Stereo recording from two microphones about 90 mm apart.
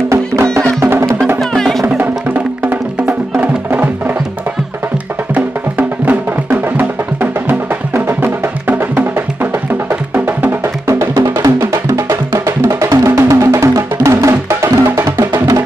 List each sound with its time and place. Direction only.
0.1 s music: 35° right (ahead or behind)
1.4 s music: 5° left (ahead or behind)
2.0 s music: 20° right (ahead or behind)
5.3 s music: 20° right (ahead or behind)